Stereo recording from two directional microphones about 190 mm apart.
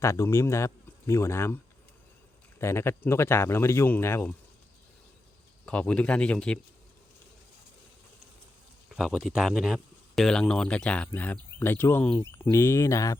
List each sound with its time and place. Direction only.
0.0 s speech: 15° left (ahead or behind)
2.6 s speech: 15° left (ahead or behind)
5.6 s speech: 5° left (ahead or behind)
8.9 s speech: centre (ahead or behind); by 13.1 s 15° left (ahead or behind)